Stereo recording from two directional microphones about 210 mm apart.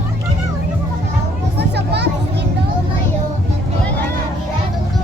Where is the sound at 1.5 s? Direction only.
50° right (ahead or behind).